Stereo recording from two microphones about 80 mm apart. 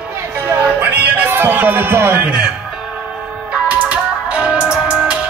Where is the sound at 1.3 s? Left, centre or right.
Right.